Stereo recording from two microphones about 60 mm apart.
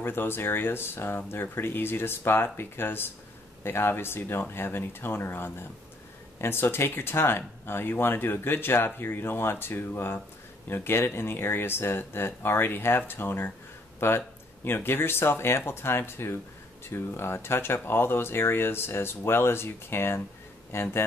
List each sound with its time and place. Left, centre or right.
0.0 s speech: left